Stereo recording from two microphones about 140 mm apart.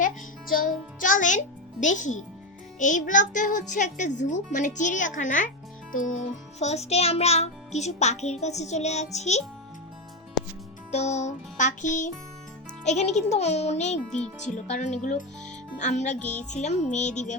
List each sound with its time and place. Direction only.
0.9 s a child's voice: 70° left (ahead or behind)
5.9 s music: 65° left (ahead or behind)
10.9 s a child's voice: 55° left (ahead or behind)
12.8 s music: 55° left (ahead or behind)
14.1 s speech: 5° left (ahead or behind)
14.5 s a child's voice: 60° left (ahead or behind)
16.2 s speech: 10° left (ahead or behind)
16.5 s a child's voice: 55° left (ahead or behind)